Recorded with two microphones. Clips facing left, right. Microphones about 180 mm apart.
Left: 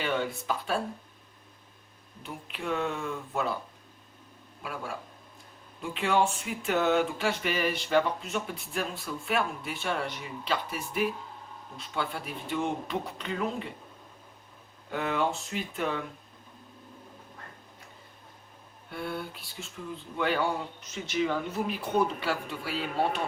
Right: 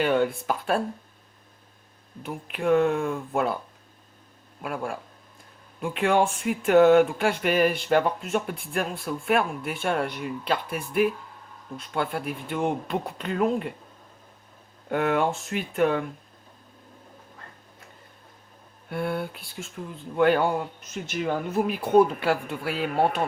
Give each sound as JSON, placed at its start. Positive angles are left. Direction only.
{"t": 0.0, "sound": "speech", "side_deg": -50}
{"t": 2.2, "sound": "speech", "side_deg": -55}
{"t": 4.6, "sound": "speech", "side_deg": -50}
{"t": 14.8, "sound": "speech", "side_deg": -55}
{"t": 18.9, "sound": "speech", "side_deg": -55}